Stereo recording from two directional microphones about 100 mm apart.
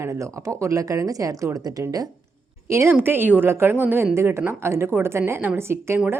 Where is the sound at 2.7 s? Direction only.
25° right (ahead or behind).